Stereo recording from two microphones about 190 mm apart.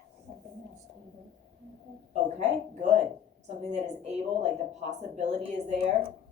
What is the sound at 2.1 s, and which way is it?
A woman's voice, 35° right (ahead or behind).